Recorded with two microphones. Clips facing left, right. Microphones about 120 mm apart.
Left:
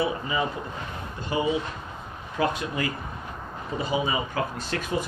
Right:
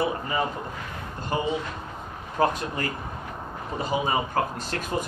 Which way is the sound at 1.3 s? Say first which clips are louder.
Left 1 dB; 45° right (ahead or behind).